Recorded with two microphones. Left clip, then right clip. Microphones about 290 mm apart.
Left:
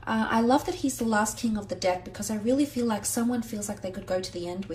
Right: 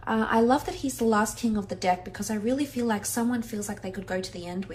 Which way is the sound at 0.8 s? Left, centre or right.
Right.